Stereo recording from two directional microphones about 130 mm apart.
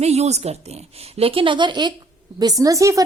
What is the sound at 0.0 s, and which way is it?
Speech, 55° right (ahead or behind).